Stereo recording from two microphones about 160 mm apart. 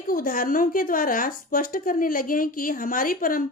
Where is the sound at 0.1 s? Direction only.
60° left (ahead or behind).